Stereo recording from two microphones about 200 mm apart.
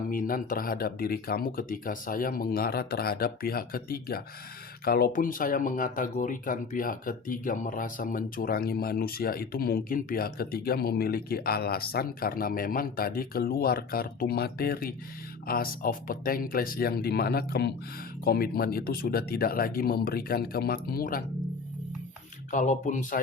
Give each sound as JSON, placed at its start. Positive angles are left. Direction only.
{"t": 0.1, "sound": "speech", "side_deg": 45}
{"t": 22.5, "sound": "speech", "side_deg": 40}